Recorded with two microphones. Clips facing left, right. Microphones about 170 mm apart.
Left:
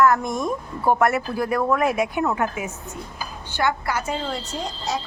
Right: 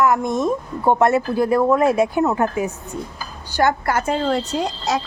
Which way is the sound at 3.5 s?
40° right (ahead or behind).